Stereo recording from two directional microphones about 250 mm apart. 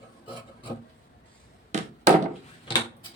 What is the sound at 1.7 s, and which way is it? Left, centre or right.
Chop, right.